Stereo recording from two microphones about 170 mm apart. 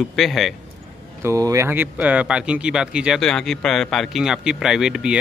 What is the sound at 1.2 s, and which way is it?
Speech, 20° right (ahead or behind).